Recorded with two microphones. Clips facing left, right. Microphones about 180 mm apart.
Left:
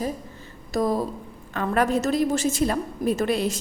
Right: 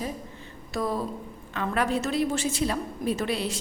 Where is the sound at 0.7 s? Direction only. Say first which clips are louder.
Left 5 dB; 40° left (ahead or behind).